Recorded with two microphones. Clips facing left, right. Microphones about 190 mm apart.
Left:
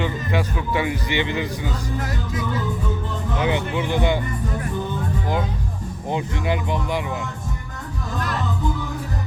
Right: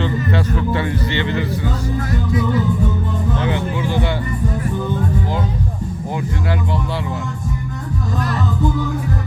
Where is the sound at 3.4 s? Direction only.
15° left (ahead or behind).